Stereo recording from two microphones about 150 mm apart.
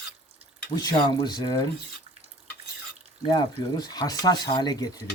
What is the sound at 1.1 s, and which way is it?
Speech, 25° left (ahead or behind).